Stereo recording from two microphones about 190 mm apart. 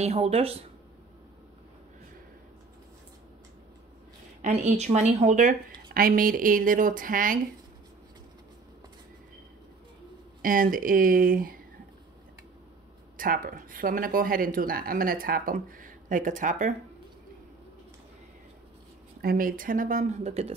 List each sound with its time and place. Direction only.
0.0 s speech: 35° right (ahead or behind)
4.4 s speech: 35° right (ahead or behind)
10.4 s speech: 45° right (ahead or behind)
13.2 s speech: 45° right (ahead or behind)
19.2 s speech: 50° right (ahead or behind)